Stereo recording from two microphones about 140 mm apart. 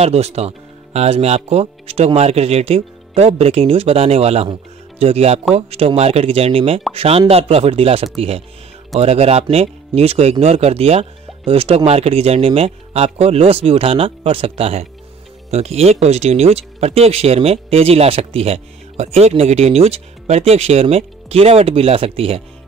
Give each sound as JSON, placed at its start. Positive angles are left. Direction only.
{"t": 0.0, "sound": "speech", "side_deg": -50}